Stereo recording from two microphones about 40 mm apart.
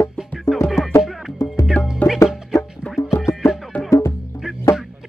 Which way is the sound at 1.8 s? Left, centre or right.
Left.